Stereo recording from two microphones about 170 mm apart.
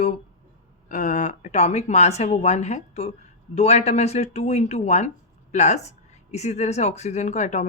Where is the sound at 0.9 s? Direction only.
50° left (ahead or behind).